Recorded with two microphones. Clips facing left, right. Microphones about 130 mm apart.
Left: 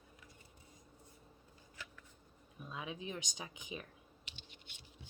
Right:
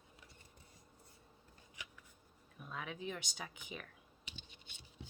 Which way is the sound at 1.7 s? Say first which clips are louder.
Left 2 dB; 15° right (ahead or behind).